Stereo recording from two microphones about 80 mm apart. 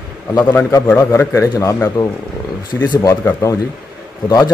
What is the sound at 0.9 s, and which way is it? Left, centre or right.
A man's voice, left.